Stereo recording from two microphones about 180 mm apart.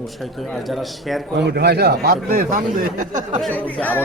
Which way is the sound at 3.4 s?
10° left (ahead or behind).